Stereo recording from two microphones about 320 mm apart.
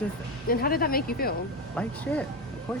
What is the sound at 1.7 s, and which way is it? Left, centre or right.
Speech, centre.